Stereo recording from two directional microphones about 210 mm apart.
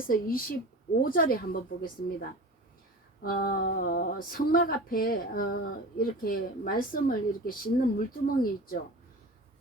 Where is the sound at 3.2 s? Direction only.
45° left (ahead or behind).